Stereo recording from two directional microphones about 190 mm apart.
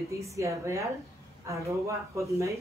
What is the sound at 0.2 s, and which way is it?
A woman's voice, 15° right (ahead or behind).